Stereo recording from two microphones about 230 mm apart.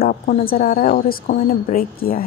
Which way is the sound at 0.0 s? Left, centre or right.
Left.